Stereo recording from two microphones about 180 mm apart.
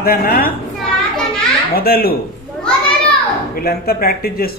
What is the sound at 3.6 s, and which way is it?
Speech, 55° left (ahead or behind).